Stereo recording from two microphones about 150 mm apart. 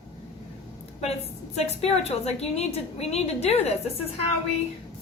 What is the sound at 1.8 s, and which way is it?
A woman's voice, 45° left (ahead or behind).